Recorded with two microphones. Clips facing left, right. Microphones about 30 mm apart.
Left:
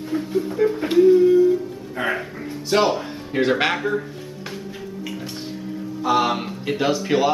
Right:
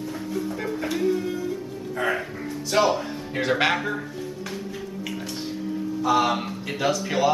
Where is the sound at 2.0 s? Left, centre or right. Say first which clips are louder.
Left 1 dB; left.